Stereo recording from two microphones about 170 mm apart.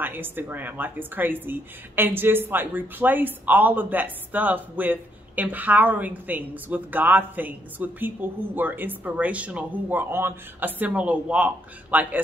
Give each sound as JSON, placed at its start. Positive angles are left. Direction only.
{"t": 0.0, "sound": "a woman's voice", "side_deg": -10}